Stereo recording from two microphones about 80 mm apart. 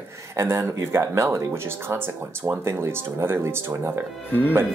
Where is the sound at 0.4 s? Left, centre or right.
Right.